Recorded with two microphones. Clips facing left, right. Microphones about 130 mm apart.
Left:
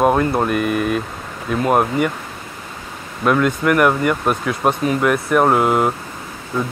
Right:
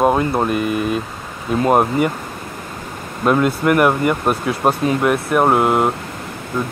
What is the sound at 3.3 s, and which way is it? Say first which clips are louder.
Speech: right 1 dB; 30° right (ahead or behind).